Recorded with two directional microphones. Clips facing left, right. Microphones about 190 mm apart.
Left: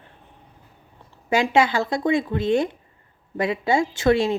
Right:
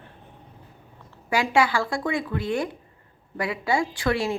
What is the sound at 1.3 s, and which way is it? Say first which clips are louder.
Speech: left 3 dB; 20° left (ahead or behind).